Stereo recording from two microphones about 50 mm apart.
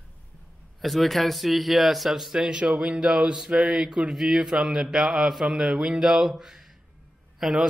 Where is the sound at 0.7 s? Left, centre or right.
Centre.